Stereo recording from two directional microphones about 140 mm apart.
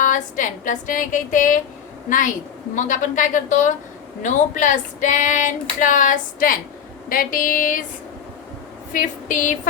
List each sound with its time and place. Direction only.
0.0 s a woman's voice: 70° left (ahead or behind)
2.7 s female singing: 65° left (ahead or behind)
7.1 s a woman's voice: 90° left; by 7.8 s 70° left (ahead or behind)
8.9 s a woman's voice: 70° left (ahead or behind)